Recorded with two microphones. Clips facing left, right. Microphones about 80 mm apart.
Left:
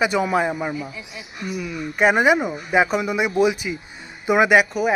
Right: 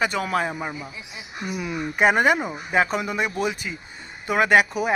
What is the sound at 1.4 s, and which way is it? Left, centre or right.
Speech, right.